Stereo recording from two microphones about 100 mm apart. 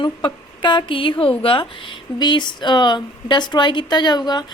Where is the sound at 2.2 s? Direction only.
50° left (ahead or behind).